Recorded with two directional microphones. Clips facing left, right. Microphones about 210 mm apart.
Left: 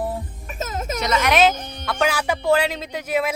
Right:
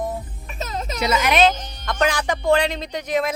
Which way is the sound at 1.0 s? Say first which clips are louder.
Even; 5° right (ahead or behind).